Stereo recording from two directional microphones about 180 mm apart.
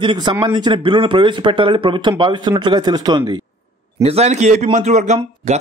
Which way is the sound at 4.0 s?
35° right (ahead or behind).